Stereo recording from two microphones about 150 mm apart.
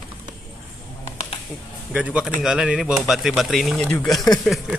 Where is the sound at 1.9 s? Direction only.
5° right (ahead or behind).